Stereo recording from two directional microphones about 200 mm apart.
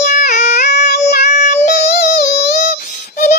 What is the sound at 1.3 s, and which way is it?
Child singing, 40° left (ahead or behind).